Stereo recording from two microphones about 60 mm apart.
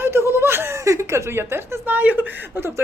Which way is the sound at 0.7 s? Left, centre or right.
Right.